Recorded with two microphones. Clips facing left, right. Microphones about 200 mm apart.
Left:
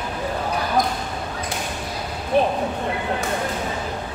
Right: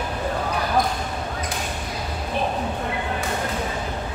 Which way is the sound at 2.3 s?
55° left (ahead or behind).